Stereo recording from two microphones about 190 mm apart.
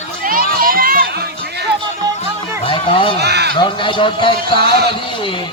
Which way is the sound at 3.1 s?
60° right (ahead or behind).